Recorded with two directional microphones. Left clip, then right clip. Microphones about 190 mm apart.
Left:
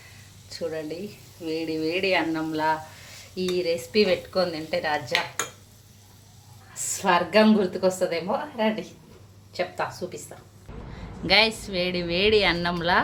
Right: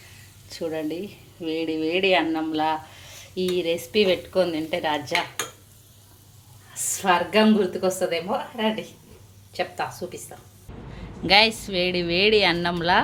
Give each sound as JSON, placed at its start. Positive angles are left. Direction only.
{"t": 0.5, "sound": "a woman's voice", "side_deg": -20}
{"t": 6.9, "sound": "a woman's voice", "side_deg": 0}